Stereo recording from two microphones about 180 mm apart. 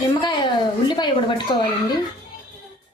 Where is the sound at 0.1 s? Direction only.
25° left (ahead or behind).